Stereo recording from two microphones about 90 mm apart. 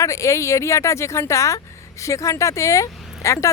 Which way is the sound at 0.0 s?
35° left (ahead or behind).